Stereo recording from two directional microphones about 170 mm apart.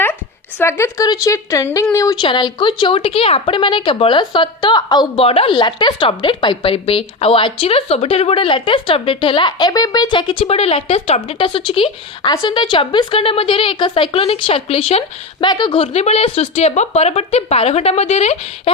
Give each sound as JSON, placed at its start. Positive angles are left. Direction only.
{"t": 0.6, "sound": "a woman's voice", "side_deg": 15}